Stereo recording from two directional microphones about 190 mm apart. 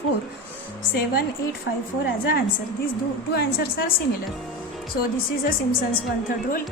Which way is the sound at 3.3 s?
55° left (ahead or behind).